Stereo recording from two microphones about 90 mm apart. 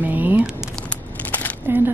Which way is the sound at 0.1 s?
20° right (ahead or behind).